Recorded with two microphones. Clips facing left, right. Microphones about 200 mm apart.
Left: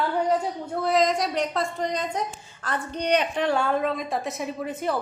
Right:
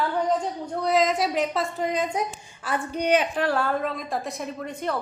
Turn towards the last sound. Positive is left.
turn(degrees=5)  # may be behind; listen again after turning